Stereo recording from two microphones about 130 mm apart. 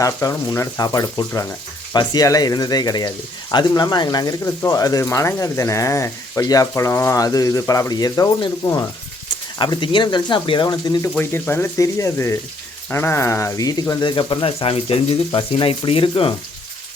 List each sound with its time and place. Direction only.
0.0 s speech: 25° left (ahead or behind)
11.2 s speech: 15° left (ahead or behind)
14.0 s speech: 40° left (ahead or behind)